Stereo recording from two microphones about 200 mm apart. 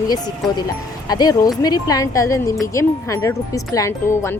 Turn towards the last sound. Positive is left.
turn(degrees=15)  # may be behind; listen again after turning